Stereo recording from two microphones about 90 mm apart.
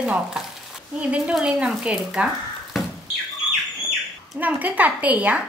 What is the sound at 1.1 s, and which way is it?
Speech, 10° right (ahead or behind).